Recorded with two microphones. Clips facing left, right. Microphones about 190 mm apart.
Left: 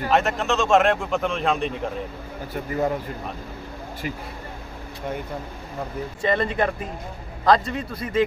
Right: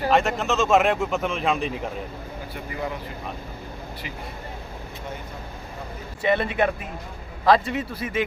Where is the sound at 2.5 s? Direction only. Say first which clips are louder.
Left 8 dB; 45° left (ahead or behind).